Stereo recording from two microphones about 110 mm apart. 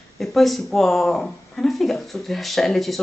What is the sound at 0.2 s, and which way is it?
Speech, centre (ahead or behind).